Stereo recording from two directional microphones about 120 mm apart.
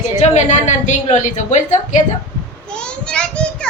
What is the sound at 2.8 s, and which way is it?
Child singing, 10° left (ahead or behind).